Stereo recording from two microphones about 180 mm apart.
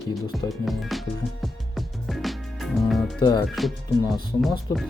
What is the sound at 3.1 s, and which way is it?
Speech, 25° left (ahead or behind).